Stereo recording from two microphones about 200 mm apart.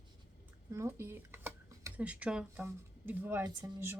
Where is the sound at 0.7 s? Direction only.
15° right (ahead or behind).